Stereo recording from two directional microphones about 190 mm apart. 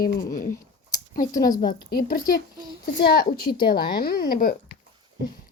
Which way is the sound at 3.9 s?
55° left (ahead or behind).